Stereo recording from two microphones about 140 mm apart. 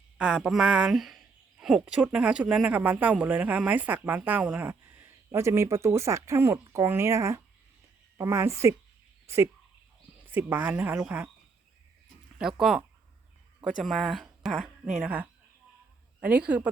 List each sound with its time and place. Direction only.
0.2 s a woman's voice: 5° right (ahead or behind)
12.4 s speech: 5° right (ahead or behind)